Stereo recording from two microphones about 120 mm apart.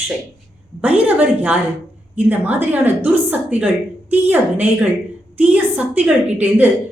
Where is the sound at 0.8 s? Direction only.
15° right (ahead or behind).